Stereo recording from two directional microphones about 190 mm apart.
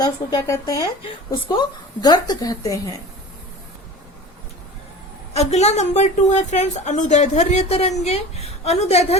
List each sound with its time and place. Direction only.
0.0 s a woman's voice: 20° left (ahead or behind)
5.3 s a woman's voice: 35° left (ahead or behind)